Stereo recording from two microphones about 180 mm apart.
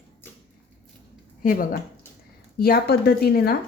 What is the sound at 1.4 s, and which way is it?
A woman's voice, 50° left (ahead or behind).